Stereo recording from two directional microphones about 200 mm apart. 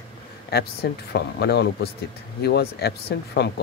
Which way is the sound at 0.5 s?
50° left (ahead or behind).